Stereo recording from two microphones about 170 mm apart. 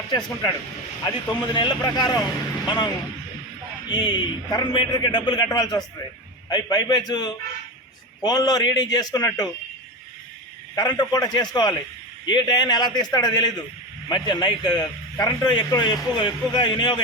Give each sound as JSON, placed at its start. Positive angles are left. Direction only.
{"t": 1.0, "sound": "a man's voice", "side_deg": 25}
{"t": 10.8, "sound": "a man's voice", "side_deg": 25}